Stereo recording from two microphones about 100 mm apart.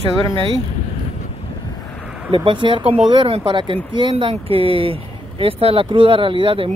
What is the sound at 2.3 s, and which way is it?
Speech, 55° right (ahead or behind).